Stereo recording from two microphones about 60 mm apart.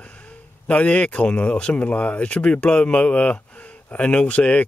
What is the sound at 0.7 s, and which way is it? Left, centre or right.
Speech, left.